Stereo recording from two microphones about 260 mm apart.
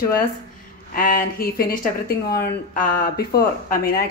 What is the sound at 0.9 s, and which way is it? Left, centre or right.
Speech, left.